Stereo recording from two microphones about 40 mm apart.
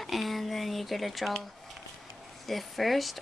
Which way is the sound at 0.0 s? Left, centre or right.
Centre.